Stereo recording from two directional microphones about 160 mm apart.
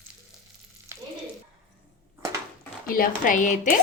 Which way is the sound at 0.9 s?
20° right (ahead or behind).